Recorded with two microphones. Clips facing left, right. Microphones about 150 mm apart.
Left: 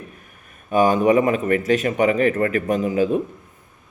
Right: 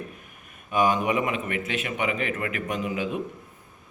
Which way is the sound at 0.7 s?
35° left (ahead or behind).